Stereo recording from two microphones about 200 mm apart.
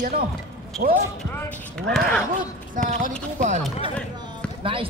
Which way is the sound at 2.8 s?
40° right (ahead or behind).